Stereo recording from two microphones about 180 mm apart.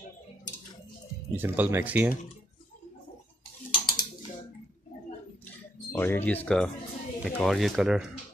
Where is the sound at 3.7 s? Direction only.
25° left (ahead or behind).